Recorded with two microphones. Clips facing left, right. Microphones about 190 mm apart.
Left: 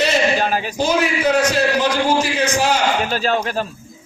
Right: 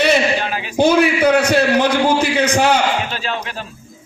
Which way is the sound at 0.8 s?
60° right (ahead or behind).